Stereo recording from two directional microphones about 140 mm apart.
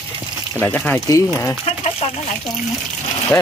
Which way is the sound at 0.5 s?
10° left (ahead or behind).